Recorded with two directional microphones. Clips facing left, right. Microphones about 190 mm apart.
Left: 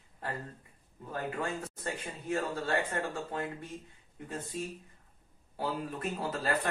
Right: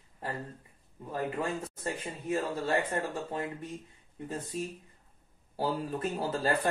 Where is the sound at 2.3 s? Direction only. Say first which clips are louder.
Right 2 dB; 25° right (ahead or behind).